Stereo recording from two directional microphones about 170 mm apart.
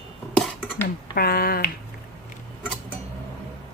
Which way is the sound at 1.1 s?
65° left (ahead or behind).